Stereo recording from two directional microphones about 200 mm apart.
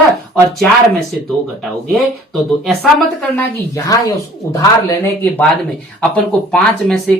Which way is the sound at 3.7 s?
15° left (ahead or behind).